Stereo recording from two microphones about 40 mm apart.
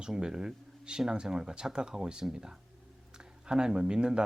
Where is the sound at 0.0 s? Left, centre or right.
Centre.